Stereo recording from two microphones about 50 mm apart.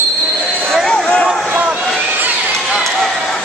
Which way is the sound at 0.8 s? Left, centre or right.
Centre.